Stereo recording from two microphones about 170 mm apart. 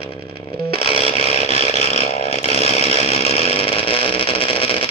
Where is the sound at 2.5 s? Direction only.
35° left (ahead or behind).